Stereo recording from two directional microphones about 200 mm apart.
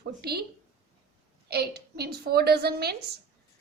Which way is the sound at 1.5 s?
50° right (ahead or behind).